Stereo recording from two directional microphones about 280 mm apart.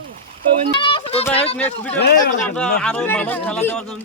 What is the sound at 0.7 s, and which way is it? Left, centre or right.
Speech, centre.